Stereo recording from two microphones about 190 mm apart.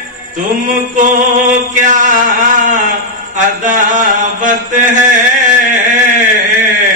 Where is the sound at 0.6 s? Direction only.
45° right (ahead or behind).